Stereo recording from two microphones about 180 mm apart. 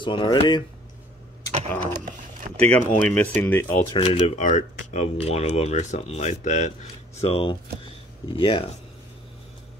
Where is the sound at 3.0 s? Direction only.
10° left (ahead or behind).